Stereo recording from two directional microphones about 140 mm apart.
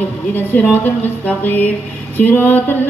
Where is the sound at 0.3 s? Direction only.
15° left (ahead or behind).